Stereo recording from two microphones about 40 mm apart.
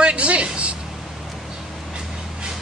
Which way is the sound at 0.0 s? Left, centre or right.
Right.